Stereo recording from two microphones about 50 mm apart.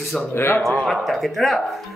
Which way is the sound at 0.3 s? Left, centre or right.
Left.